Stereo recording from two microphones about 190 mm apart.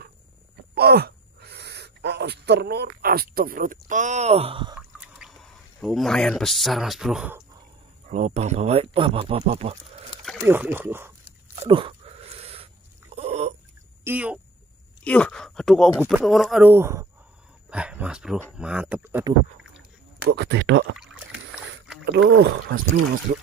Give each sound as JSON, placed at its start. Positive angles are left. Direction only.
{"t": 0.7, "sound": "speech", "side_deg": -55}
{"t": 4.7, "sound": "pour", "side_deg": -5}
{"t": 8.1, "sound": "speech", "side_deg": -35}
{"t": 10.4, "sound": "speech", "side_deg": -10}
{"t": 11.6, "sound": "a sound", "side_deg": -30}
{"t": 14.0, "sound": "speech", "side_deg": -10}
{"t": 15.0, "sound": "speech", "side_deg": 5}
{"t": 16.0, "sound": "speech", "side_deg": -10}
{"t": 16.7, "sound": "speech", "side_deg": -15}
{"t": 20.2, "sound": "speech", "side_deg": -65}
{"t": 21.0, "sound": "rowboat", "side_deg": -5}
{"t": 22.0, "sound": "speech", "side_deg": -60}